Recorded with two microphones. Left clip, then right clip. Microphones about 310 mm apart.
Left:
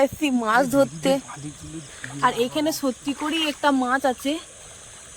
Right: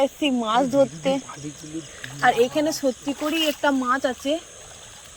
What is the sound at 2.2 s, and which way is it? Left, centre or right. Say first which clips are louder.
Speech: right 3 dB; centre.